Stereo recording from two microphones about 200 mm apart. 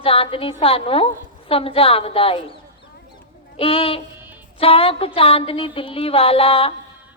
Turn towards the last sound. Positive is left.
turn(degrees=30)  # may be behind; listen again after turning